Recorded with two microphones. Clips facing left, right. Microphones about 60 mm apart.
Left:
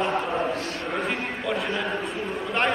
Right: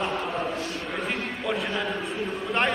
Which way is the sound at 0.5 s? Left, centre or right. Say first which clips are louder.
Left 1 dB; left.